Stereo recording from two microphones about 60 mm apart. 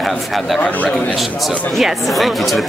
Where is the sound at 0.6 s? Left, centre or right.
Left.